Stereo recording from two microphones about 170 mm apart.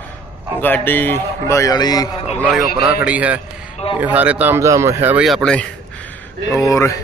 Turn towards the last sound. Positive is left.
turn(degrees=15)  # may be behind; listen again after turning